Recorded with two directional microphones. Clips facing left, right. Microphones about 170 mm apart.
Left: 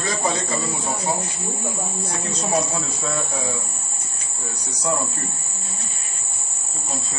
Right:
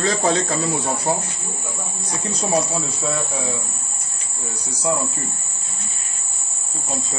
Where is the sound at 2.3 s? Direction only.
10° right (ahead or behind).